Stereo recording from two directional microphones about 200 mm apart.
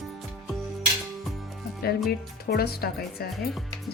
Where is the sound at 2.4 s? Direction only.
50° left (ahead or behind).